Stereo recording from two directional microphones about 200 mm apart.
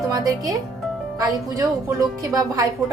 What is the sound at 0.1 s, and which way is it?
A woman's voice, 20° right (ahead or behind).